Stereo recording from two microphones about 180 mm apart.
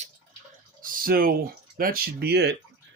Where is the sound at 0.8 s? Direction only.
50° right (ahead or behind).